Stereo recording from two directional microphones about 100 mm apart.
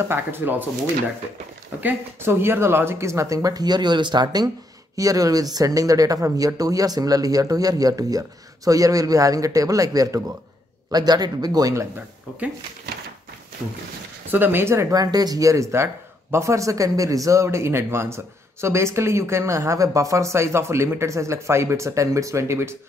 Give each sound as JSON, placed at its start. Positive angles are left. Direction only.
{"t": 0.1, "sound": "speech", "side_deg": -20}
{"t": 1.8, "sound": "speech", "side_deg": -20}
{"t": 14.3, "sound": "speech", "side_deg": -20}
{"t": 15.0, "sound": "speech", "side_deg": -40}